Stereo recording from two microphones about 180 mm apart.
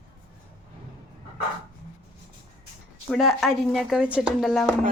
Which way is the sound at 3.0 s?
Centre (ahead or behind).